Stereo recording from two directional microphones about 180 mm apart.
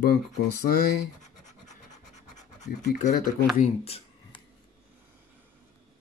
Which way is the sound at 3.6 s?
35° left (ahead or behind).